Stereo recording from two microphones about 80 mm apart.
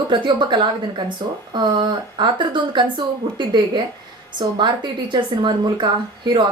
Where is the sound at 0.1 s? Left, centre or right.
Right.